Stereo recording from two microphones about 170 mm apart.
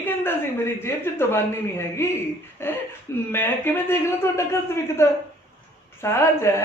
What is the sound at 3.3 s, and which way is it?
A man's voice, 10° left (ahead or behind).